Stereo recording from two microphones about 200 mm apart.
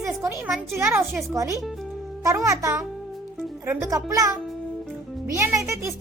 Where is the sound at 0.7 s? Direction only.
15° right (ahead or behind).